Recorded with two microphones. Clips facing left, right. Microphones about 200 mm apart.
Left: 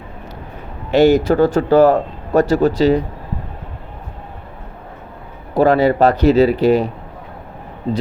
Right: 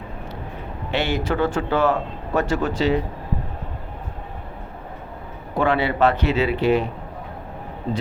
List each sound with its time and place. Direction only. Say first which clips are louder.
0.9 s a man's voice: left 12 dB; 40° left (ahead or behind)
5.5 s a man's voice: left 7 dB; 40° left (ahead or behind)